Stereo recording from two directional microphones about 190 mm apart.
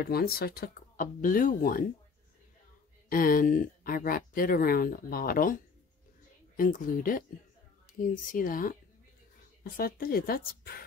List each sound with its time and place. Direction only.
0.0 s speech: 55° left (ahead or behind)
3.1 s speech: 50° left (ahead or behind)